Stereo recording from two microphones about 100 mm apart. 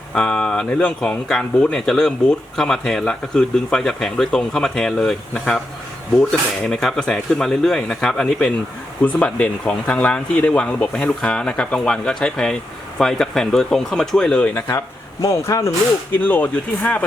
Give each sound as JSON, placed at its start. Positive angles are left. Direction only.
{"t": 0.1, "sound": "speech", "side_deg": 10}
{"t": 6.7, "sound": "speech", "side_deg": 5}
{"t": 15.2, "sound": "speech", "side_deg": 35}
{"t": 16.2, "sound": "speech", "side_deg": 15}